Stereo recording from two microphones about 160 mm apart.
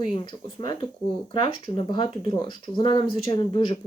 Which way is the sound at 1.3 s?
30° left (ahead or behind).